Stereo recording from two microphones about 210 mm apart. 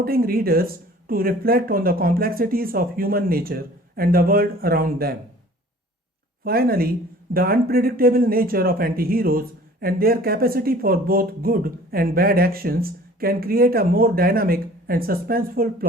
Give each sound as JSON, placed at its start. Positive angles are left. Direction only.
{"t": 0.0, "sound": "speech", "side_deg": -45}
{"t": 6.4, "sound": "speech", "side_deg": -45}